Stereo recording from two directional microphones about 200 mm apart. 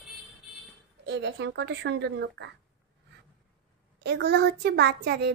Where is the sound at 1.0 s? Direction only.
60° right (ahead or behind).